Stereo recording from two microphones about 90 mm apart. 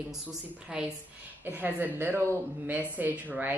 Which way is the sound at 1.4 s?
20° right (ahead or behind).